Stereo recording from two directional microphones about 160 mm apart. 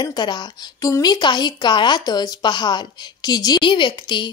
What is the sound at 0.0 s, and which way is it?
A woman's voice, 25° left (ahead or behind).